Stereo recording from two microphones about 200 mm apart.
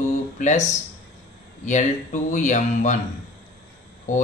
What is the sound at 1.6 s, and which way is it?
Speech, 40° left (ahead or behind).